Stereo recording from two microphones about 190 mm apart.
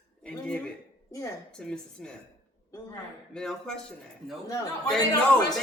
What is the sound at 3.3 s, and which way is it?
Speech, 5° left (ahead or behind).